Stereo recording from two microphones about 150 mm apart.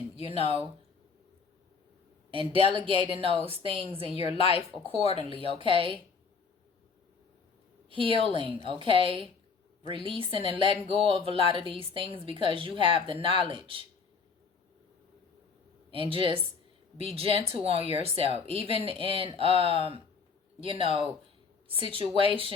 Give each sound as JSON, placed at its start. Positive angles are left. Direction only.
{"t": 0.2, "sound": "a woman's voice", "side_deg": 40}
{"t": 2.3, "sound": "speech", "side_deg": -35}
{"t": 4.1, "sound": "a woman's voice", "side_deg": 40}
{"t": 5.1, "sound": "speech", "side_deg": -35}
{"t": 7.9, "sound": "a woman's voice", "side_deg": -35}
{"t": 15.9, "sound": "speech", "side_deg": -35}
{"t": 22.2, "sound": "speech", "side_deg": -35}